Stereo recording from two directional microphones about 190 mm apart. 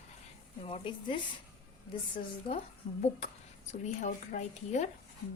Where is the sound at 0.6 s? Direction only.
25° left (ahead or behind).